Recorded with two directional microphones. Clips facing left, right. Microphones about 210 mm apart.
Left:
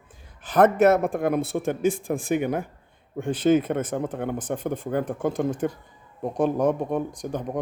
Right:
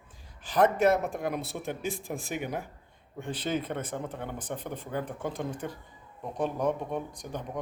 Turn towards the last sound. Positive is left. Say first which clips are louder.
# left 8 dB
turn(degrees=45)  # may be behind; listen again after turning